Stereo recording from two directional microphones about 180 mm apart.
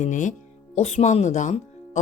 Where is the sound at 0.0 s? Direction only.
45° left (ahead or behind).